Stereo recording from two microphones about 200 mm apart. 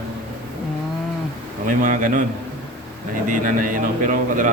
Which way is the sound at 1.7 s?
40° right (ahead or behind).